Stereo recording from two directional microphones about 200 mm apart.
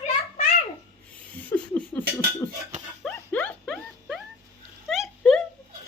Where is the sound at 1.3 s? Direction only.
5° left (ahead or behind).